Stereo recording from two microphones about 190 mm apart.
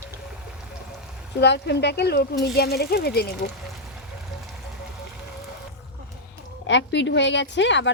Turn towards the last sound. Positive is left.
turn(degrees=70)  # may be behind; listen again after turning